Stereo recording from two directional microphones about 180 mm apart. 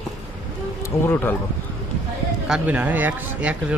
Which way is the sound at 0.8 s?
10° left (ahead or behind).